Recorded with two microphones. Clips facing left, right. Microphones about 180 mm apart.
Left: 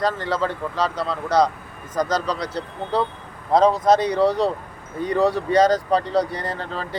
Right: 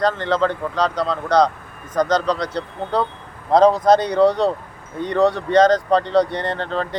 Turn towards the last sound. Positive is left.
turn(degrees=5)  # may be behind; listen again after turning